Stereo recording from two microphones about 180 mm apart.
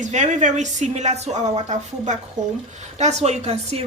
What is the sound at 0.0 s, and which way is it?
Speech, 40° right (ahead or behind).